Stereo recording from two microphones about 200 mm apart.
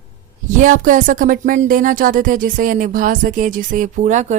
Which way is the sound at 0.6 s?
40° right (ahead or behind).